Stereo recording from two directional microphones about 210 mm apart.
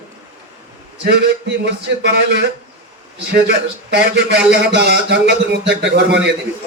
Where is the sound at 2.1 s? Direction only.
55° right (ahead or behind).